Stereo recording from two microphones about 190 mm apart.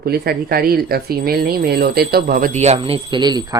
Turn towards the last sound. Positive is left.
turn(degrees=-20)  # may be behind; listen again after turning